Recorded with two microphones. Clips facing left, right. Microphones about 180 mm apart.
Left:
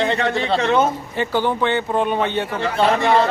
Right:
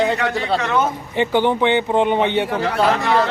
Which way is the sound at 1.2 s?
20° right (ahead or behind).